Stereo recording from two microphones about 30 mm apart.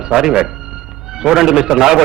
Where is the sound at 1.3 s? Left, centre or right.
Centre.